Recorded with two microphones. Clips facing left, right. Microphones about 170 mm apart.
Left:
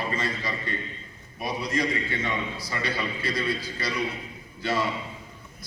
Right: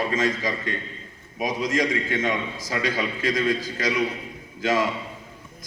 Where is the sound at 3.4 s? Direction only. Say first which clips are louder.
Right 6 dB; 45° right (ahead or behind).